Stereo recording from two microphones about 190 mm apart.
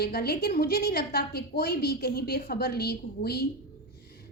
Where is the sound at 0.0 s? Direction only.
55° left (ahead or behind).